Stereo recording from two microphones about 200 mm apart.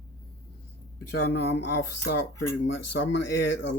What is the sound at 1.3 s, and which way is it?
Speech, 55° left (ahead or behind).